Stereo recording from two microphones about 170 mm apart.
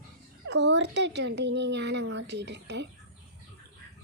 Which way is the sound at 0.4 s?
90° right.